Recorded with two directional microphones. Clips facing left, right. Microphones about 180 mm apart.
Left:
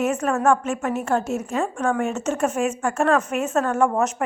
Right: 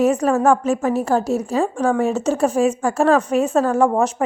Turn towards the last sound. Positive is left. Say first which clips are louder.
# right 4 dB
turn(degrees=-35)  # may be behind; listen again after turning